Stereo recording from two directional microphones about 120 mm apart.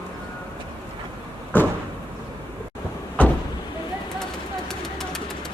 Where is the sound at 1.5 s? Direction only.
15° left (ahead or behind).